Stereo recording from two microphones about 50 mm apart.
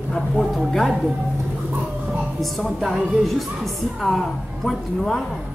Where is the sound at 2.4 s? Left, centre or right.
Centre.